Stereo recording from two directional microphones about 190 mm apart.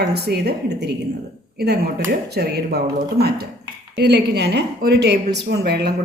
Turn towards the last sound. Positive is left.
turn(degrees=-60)  # may be behind; listen again after turning